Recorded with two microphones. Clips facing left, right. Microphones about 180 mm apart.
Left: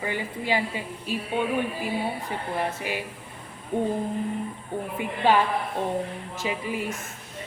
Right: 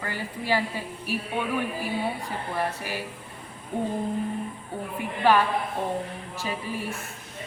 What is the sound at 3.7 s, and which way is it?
Speech, 20° left (ahead or behind).